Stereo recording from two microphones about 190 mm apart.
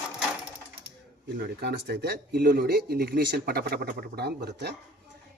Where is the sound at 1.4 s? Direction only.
60° right (ahead or behind).